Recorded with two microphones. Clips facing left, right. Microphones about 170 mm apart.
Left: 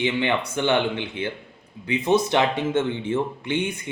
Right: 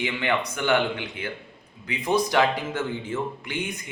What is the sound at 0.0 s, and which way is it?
Speech, 25° left (ahead or behind).